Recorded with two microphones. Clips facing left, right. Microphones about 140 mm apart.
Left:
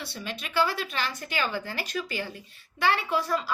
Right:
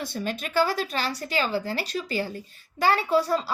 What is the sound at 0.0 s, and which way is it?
A woman's voice, 45° right (ahead or behind).